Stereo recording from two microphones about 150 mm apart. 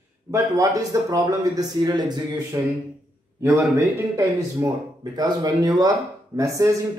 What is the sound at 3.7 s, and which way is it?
A man's voice, 20° right (ahead or behind).